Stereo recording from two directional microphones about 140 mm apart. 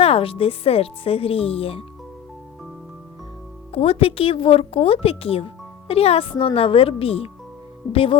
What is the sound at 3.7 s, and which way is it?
Speech, 45° left (ahead or behind).